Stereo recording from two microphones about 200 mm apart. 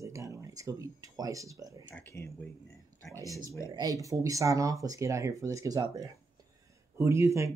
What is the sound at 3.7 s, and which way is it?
Speech, 15° right (ahead or behind).